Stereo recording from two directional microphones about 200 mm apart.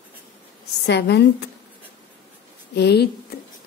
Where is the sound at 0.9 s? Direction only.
60° left (ahead or behind).